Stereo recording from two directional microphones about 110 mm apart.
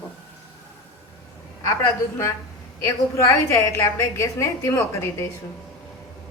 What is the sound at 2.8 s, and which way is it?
A woman's voice, 25° left (ahead or behind).